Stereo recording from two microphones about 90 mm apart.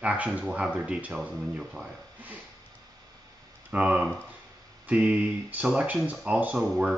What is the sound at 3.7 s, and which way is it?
Speech, 15° right (ahead or behind).